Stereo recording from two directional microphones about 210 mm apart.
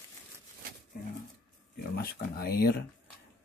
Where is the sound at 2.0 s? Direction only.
45° left (ahead or behind).